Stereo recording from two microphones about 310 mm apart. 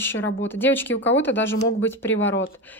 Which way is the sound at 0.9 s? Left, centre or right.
Left.